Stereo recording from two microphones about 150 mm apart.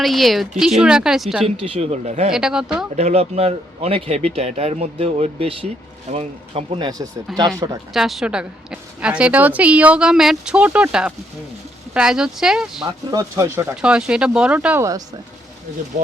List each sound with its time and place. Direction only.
0.0 s speech: centre (ahead or behind)
1.5 s speech: 40° right (ahead or behind)
2.3 s speech: 5° right (ahead or behind)
2.9 s speech: 45° right (ahead or behind)
7.3 s a woman's voice: centre (ahead or behind)
13.1 s speech: 25° right (ahead or behind)
13.8 s a woman's voice: 5° right (ahead or behind)